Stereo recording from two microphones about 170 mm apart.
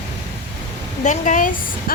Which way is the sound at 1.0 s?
45° left (ahead or behind).